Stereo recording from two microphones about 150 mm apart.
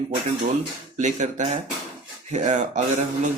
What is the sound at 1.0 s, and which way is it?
Speech, 55° right (ahead or behind).